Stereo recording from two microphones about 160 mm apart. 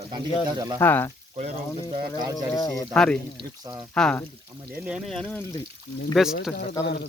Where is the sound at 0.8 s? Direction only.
15° left (ahead or behind).